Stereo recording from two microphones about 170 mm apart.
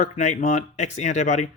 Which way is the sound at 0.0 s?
45° left (ahead or behind).